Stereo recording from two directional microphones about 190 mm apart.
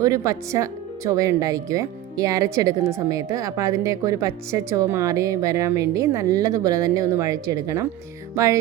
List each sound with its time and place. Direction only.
0.0 s speech: 15° right (ahead or behind)